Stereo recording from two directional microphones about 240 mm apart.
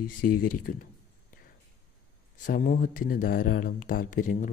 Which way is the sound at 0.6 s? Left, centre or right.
Left.